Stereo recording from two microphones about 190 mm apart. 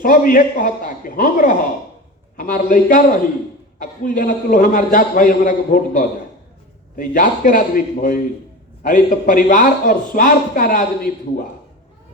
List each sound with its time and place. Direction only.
0.0 s a man's voice: 45° left (ahead or behind)